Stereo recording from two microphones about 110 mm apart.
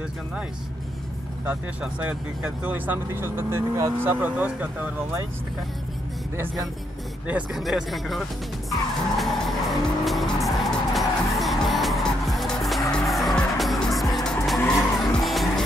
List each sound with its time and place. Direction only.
1.4 s speech: 15° right (ahead or behind)
7.5 s speech: centre (ahead or behind)
9.2 s vehicle: centre (ahead or behind)